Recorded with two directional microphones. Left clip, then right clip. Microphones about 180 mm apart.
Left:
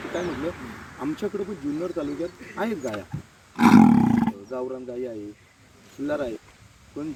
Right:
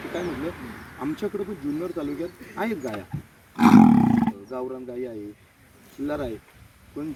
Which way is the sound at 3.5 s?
15° right (ahead or behind).